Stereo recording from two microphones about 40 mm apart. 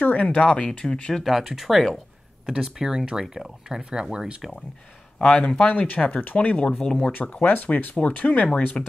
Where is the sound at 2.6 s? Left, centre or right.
Centre.